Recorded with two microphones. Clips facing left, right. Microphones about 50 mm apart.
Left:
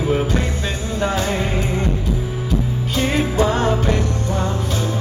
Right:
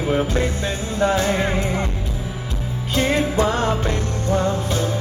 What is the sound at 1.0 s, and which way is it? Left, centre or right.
Music, right.